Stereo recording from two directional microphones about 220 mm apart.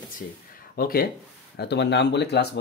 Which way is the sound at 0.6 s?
40° left (ahead or behind).